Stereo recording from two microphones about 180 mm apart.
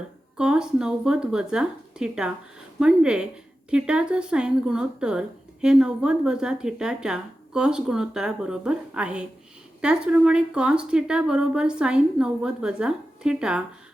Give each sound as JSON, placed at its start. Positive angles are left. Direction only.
{"t": 0.3, "sound": "speech", "side_deg": -5}